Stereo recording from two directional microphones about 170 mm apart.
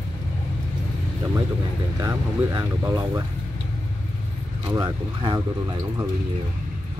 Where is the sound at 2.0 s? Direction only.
20° right (ahead or behind).